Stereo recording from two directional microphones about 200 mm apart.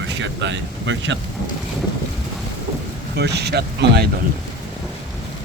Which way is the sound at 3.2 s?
55° right (ahead or behind).